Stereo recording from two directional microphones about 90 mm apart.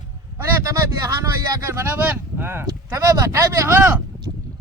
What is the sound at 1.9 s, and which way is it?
Speech, 25° right (ahead or behind).